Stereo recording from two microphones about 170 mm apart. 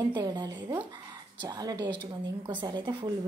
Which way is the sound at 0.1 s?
25° right (ahead or behind).